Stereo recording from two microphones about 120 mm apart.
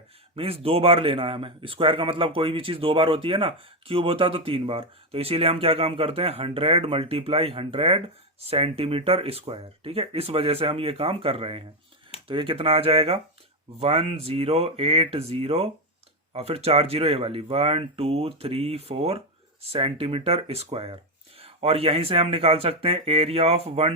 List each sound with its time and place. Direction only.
0.3 s speech: 55° right (ahead or behind)